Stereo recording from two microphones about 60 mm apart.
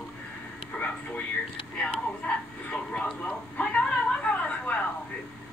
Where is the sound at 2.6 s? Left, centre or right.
Centre.